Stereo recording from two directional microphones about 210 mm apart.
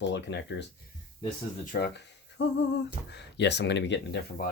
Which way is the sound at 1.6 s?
45° left (ahead or behind).